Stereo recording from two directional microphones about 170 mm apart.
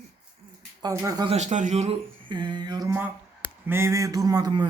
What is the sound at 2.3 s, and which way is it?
Speech, 25° right (ahead or behind).